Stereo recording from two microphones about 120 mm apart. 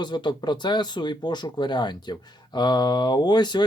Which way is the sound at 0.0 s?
40° left (ahead or behind).